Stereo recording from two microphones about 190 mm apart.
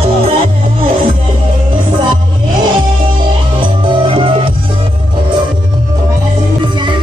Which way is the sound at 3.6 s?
25° right (ahead or behind).